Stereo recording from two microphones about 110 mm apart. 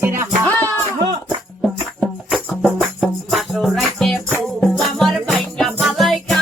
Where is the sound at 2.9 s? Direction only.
Centre (ahead or behind).